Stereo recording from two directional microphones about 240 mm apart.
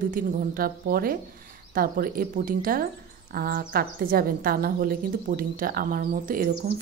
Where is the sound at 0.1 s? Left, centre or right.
Right.